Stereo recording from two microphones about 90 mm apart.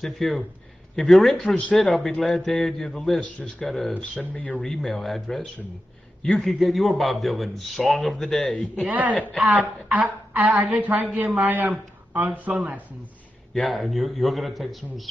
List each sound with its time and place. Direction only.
0.0 s a man's voice: centre (ahead or behind)
3.2 s a man's voice: 15° left (ahead or behind)
4.2 s a man's voice: 15° left (ahead or behind)
8.8 s a woman's voice: 15° right (ahead or behind)
13.5 s a man's voice: centre (ahead or behind)